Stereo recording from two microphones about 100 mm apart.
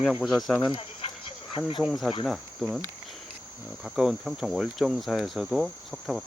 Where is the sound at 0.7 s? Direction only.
65° left (ahead or behind).